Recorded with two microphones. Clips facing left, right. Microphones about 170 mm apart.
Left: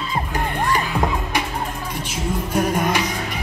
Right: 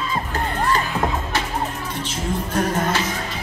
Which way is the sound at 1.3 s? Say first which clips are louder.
Even; 15° left (ahead or behind).